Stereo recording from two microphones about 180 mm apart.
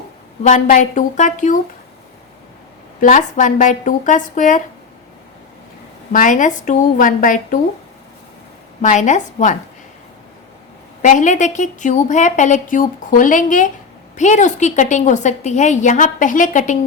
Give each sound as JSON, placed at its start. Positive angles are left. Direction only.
{"t": 0.4, "sound": "a woman's voice", "side_deg": 45}
{"t": 3.0, "sound": "a woman's voice", "side_deg": 45}
{"t": 6.1, "sound": "a woman's voice", "side_deg": 45}
{"t": 8.8, "sound": "a woman's voice", "side_deg": 45}
{"t": 11.0, "sound": "a woman's voice", "side_deg": 45}